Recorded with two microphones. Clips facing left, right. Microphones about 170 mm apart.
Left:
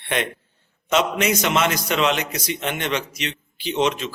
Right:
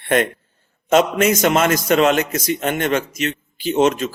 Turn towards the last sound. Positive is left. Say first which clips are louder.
# right 5 dB
turn(degrees=-45)  # may be behind; listen again after turning